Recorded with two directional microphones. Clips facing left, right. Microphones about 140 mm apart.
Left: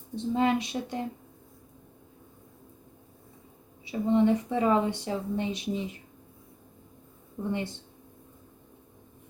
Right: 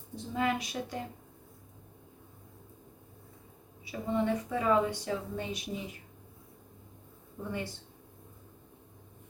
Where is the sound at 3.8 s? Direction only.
25° left (ahead or behind).